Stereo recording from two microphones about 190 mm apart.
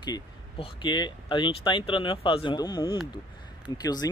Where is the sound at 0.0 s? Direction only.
25° left (ahead or behind).